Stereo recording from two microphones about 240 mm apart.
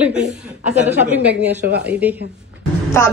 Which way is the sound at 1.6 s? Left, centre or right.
Right.